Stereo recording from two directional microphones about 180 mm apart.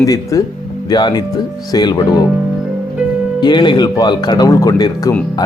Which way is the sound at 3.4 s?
25° left (ahead or behind).